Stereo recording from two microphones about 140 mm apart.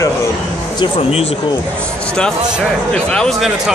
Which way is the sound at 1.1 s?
45° left (ahead or behind).